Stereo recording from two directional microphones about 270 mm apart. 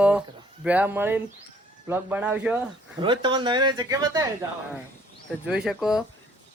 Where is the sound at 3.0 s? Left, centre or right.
Centre.